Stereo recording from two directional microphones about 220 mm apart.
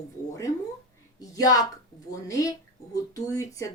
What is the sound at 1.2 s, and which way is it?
Speech, 15° left (ahead or behind).